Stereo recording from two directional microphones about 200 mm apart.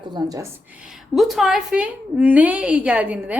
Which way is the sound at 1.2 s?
Centre (ahead or behind).